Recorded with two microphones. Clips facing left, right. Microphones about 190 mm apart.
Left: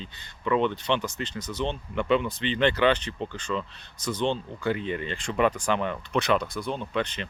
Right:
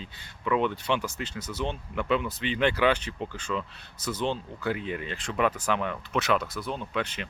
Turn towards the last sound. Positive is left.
turn(degrees=-5)  # may be behind; listen again after turning